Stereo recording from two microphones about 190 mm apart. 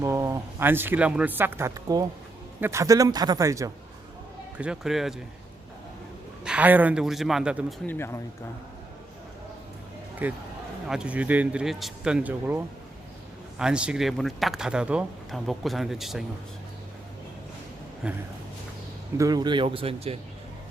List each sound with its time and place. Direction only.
0.0 s speech: 15° right (ahead or behind)
4.5 s speech: 5° right (ahead or behind)
6.4 s speech: 5° right (ahead or behind)
7.9 s speech: 10° left (ahead or behind)
10.2 s speech: 10° right (ahead or behind)
18.0 s speech: 5° right (ahead or behind)
19.1 s speech: 20° right (ahead or behind)